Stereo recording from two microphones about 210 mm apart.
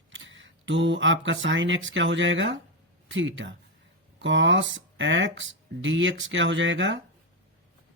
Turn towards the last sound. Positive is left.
turn(degrees=-60)  # may be behind; listen again after turning